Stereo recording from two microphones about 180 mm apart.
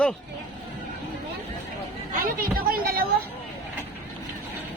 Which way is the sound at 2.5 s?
55° right (ahead or behind).